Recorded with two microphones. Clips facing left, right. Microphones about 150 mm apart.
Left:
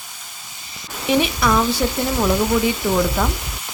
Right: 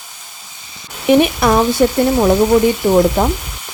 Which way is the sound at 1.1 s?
55° right (ahead or behind).